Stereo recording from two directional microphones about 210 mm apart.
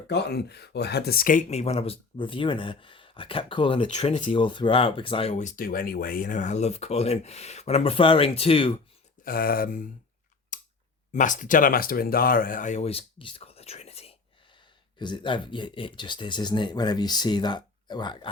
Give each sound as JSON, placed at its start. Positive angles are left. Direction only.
{"t": 0.1, "sound": "speech", "side_deg": 50}
{"t": 9.2, "sound": "speech", "side_deg": 45}
{"t": 10.5, "sound": "clicking", "side_deg": 35}
{"t": 11.1, "sound": "speech", "side_deg": 35}